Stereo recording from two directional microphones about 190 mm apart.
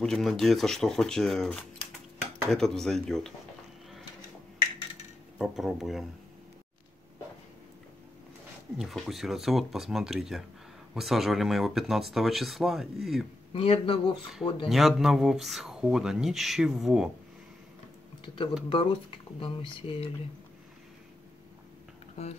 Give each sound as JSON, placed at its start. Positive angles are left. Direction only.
{"t": 0.0, "sound": "speech", "side_deg": 0}
{"t": 5.4, "sound": "speech", "side_deg": 0}
{"t": 8.7, "sound": "speech", "side_deg": 0}
{"t": 13.5, "sound": "speech", "side_deg": 30}
{"t": 14.7, "sound": "speech", "side_deg": 0}
{"t": 18.2, "sound": "speech", "side_deg": 25}
{"t": 22.2, "sound": "music", "side_deg": 35}